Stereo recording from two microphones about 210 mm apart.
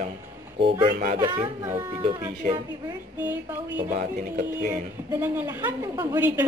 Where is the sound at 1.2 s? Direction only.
15° right (ahead or behind).